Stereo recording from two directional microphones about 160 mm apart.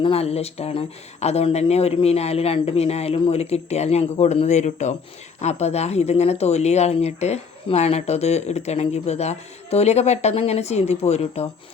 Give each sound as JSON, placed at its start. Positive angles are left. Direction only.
{"t": 0.0, "sound": "speech", "side_deg": 40}